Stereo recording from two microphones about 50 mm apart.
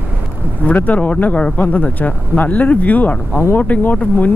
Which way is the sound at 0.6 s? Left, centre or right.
Left.